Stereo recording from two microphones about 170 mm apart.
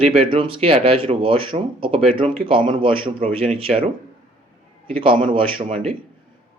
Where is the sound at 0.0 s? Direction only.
35° right (ahead or behind).